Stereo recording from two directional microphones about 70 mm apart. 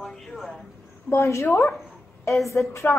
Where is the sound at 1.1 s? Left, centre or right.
Left.